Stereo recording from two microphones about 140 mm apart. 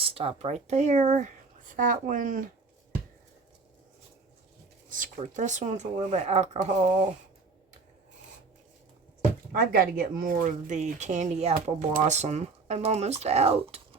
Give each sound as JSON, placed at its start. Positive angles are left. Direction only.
{"t": 0.0, "sound": "speech", "side_deg": -40}
{"t": 1.7, "sound": "speech", "side_deg": -70}
{"t": 4.9, "sound": "speech", "side_deg": -70}
{"t": 9.6, "sound": "speech", "side_deg": -90}